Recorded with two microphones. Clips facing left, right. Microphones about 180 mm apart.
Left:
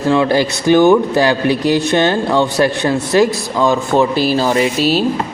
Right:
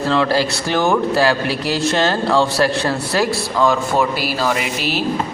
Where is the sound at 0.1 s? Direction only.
15° left (ahead or behind).